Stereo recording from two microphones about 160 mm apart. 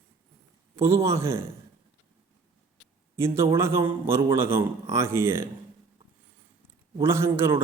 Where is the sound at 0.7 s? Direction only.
15° right (ahead or behind).